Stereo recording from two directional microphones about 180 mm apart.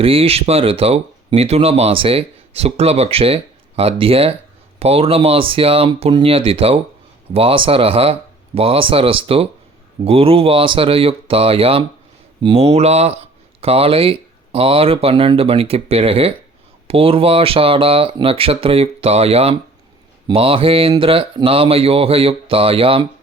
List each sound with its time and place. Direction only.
0.0 s speech: 30° right (ahead or behind)